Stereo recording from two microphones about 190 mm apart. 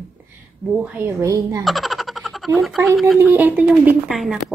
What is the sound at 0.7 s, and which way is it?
Speech, 10° right (ahead or behind).